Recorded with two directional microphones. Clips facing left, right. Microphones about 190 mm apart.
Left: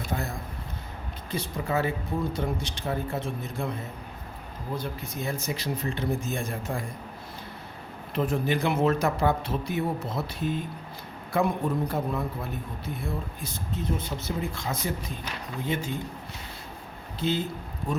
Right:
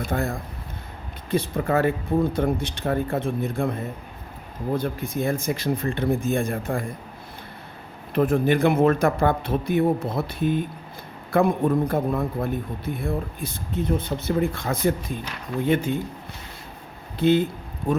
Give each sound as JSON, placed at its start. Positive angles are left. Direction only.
{"t": 0.1, "sound": "a man's voice", "side_deg": -55}
{"t": 8.1, "sound": "a man's voice", "side_deg": -55}
{"t": 17.2, "sound": "a man's voice", "side_deg": -60}